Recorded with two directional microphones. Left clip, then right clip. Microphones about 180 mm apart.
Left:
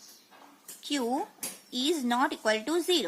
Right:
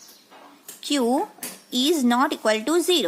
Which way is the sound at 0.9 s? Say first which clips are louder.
Right 8 dB; 25° right (ahead or behind).